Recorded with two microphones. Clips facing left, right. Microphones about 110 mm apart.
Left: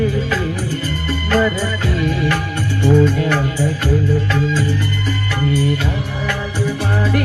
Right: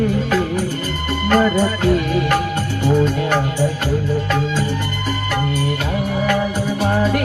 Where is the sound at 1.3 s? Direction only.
55° right (ahead or behind).